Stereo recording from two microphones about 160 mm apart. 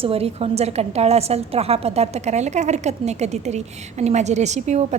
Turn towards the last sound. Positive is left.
turn(degrees=-45)  # may be behind; listen again after turning